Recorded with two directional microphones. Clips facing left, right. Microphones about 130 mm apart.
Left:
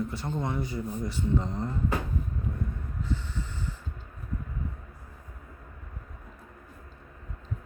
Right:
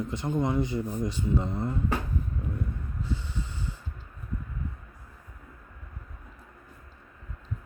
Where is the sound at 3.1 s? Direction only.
15° right (ahead or behind).